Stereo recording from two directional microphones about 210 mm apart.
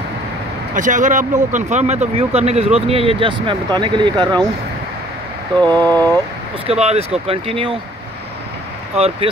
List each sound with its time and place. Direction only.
0.7 s speech: 35° right (ahead or behind); by 4.5 s 20° right (ahead or behind)
5.6 s a sound: 10° left (ahead or behind)
6.7 s speech: 30° right (ahead or behind)
8.9 s speech: 30° right (ahead or behind)